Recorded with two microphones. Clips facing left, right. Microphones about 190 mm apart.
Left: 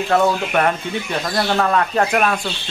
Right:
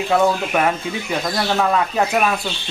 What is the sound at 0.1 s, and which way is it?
Speech, 10° right (ahead or behind).